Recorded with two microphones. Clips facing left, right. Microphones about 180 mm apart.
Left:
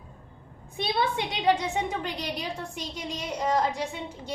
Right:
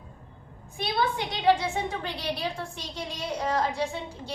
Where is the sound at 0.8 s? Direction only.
20° left (ahead or behind).